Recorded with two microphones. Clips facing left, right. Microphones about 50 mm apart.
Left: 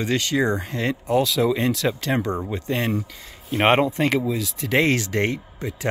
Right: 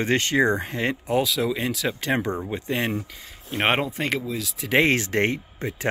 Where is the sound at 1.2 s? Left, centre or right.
Centre.